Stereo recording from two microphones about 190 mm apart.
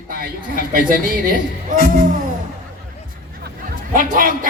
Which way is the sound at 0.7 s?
45° right (ahead or behind).